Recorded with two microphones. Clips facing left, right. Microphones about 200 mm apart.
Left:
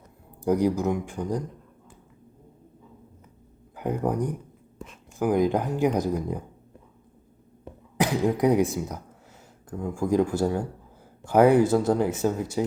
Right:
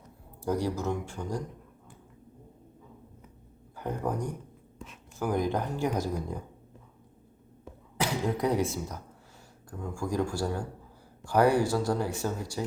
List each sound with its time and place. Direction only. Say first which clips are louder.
0.4 s speech: left 7 dB; 15° left (ahead or behind)
3.8 s speech: left 6 dB; 15° left (ahead or behind)
7.9 s speech: left 6 dB; 15° left (ahead or behind)